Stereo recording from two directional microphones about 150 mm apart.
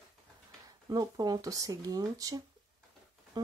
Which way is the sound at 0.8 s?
25° right (ahead or behind).